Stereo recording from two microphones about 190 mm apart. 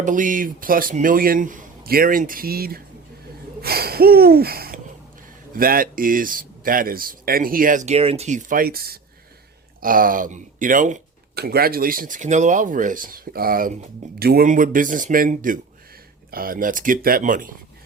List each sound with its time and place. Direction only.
0.0 s speech: 45° right (ahead or behind)
3.6 s a sound: 55° right (ahead or behind)
5.5 s speech: 50° right (ahead or behind)
11.3 s speech: 55° right (ahead or behind)